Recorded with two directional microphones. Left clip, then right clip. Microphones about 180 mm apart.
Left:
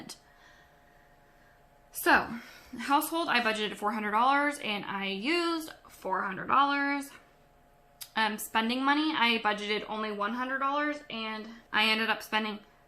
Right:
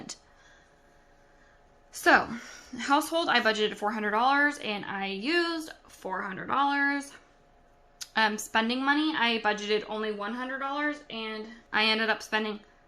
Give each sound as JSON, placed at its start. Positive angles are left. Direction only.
{"t": 1.9, "sound": "a woman's voice", "side_deg": -30}
{"t": 11.7, "sound": "a woman's voice", "side_deg": -25}